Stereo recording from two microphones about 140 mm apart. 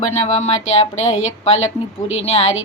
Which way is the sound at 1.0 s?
55° left (ahead or behind).